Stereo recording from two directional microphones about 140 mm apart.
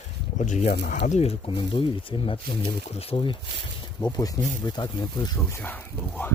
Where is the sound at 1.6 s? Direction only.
35° left (ahead or behind).